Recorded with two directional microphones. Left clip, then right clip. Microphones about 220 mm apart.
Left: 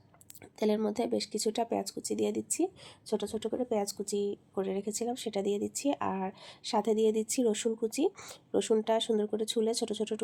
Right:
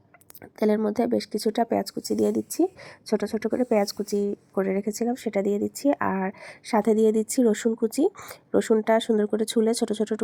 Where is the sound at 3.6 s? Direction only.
15° right (ahead or behind).